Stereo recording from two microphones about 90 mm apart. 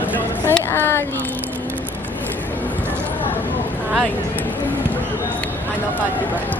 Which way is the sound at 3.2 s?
20° left (ahead or behind).